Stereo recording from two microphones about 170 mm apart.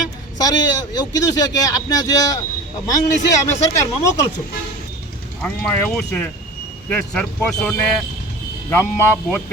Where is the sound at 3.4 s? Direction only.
15° left (ahead or behind).